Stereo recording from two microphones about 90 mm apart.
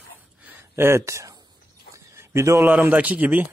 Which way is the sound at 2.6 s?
20° right (ahead or behind).